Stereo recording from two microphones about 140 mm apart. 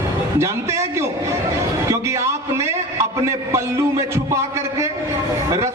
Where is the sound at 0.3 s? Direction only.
20° right (ahead or behind).